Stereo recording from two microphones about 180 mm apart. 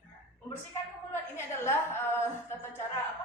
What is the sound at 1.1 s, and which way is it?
A woman's voice, 15° left (ahead or behind).